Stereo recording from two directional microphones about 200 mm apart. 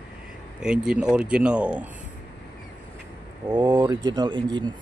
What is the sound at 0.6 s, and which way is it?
Speech, 5° right (ahead or behind).